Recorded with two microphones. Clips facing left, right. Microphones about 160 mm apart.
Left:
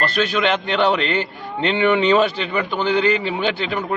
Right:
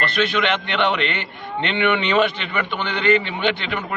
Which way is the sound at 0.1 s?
40° left (ahead or behind).